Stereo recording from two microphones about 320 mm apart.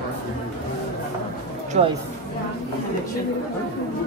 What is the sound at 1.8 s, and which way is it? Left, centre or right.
Speech, right.